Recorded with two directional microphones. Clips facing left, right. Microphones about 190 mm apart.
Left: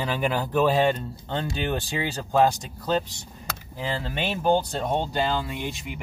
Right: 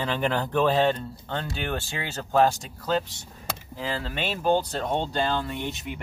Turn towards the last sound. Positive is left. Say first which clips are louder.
# even
turn(degrees=10)  # may be behind; listen again after turning